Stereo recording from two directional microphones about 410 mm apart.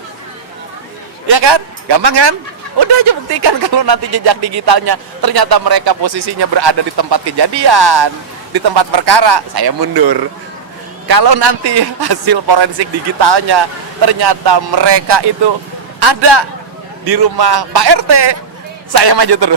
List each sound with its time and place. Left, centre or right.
1.3 s speech: right
3.3 s a man's voice: right
17.1 s a man's voice: right